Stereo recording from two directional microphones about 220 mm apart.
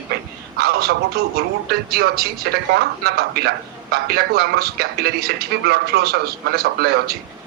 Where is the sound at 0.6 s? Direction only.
45° right (ahead or behind).